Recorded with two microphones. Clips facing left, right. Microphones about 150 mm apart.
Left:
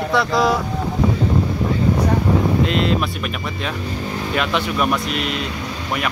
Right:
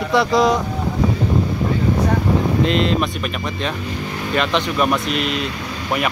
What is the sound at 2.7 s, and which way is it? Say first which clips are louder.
Speech: right 1 dB; 5° left (ahead or behind).